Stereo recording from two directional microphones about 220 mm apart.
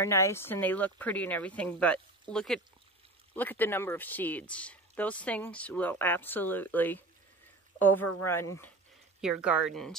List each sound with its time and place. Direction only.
0.0 s speech: 10° left (ahead or behind)
8.0 s speech: 90° left
8.3 s speech: 10° left (ahead or behind)
9.2 s speech: 5° right (ahead or behind)